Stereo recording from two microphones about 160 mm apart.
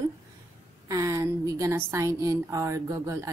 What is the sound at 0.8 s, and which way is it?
A woman's voice, 20° right (ahead or behind).